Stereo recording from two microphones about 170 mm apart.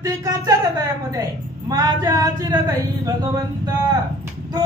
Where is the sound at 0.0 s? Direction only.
20° right (ahead or behind).